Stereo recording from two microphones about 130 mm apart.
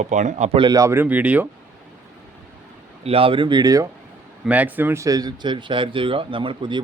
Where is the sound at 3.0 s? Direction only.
45° right (ahead or behind); by 3.9 s 30° right (ahead or behind).